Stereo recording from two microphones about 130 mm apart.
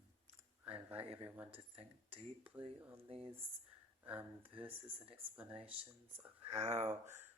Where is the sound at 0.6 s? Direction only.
10° right (ahead or behind).